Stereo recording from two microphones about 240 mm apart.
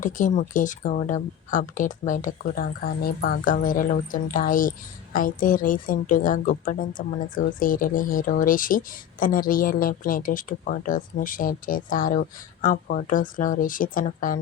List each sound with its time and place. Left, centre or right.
0.0 s a woman's voice: left